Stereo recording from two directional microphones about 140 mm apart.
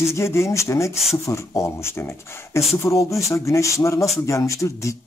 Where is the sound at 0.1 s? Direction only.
20° left (ahead or behind).